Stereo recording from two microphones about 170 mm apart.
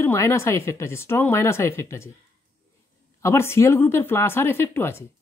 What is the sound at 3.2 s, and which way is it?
Speech, 15° left (ahead or behind).